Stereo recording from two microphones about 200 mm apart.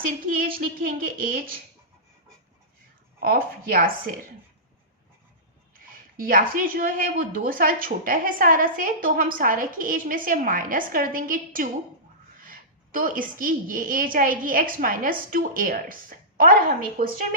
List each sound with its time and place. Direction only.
0.3 s a woman's voice: 45° right (ahead or behind)
3.2 s a woman's voice: 45° right (ahead or behind)
6.1 s a woman's voice: 45° right (ahead or behind)